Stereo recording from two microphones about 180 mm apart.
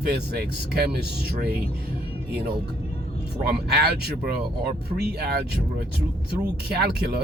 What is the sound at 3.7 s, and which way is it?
Speech, 60° right (ahead or behind).